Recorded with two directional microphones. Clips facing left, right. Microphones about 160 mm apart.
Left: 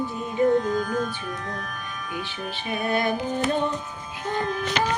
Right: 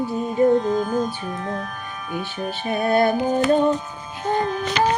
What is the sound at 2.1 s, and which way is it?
Speech, 45° right (ahead or behind).